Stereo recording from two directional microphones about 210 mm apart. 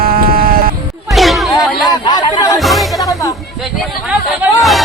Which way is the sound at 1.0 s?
Centre (ahead or behind).